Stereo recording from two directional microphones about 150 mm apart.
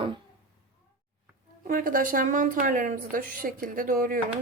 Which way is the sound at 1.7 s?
65° right (ahead or behind).